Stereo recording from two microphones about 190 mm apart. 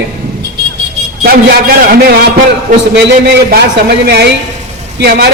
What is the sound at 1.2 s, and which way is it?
A man's voice, 55° right (ahead or behind).